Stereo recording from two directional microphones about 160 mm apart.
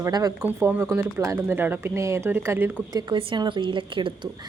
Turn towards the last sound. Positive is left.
turn(degrees=-30)  # may be behind; listen again after turning